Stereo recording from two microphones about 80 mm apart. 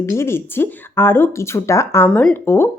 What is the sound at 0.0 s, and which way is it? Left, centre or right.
Speech, left.